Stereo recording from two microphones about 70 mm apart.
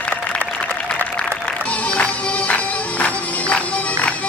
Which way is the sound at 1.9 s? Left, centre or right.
Centre.